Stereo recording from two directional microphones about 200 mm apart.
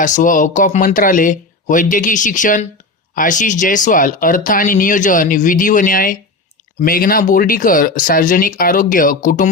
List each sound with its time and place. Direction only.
0.0 s speech: 40° left (ahead or behind)